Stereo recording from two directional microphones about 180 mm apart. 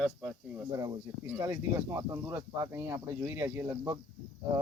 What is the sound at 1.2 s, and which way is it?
Speech, 10° right (ahead or behind).